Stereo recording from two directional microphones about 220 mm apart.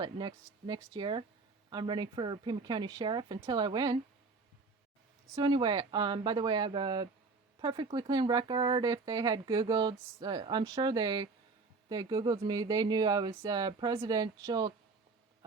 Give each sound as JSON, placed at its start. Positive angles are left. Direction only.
{"t": 0.0, "sound": "speech", "side_deg": -20}
{"t": 5.3, "sound": "speech", "side_deg": -20}